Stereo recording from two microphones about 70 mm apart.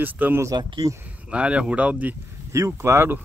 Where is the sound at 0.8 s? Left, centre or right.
Right.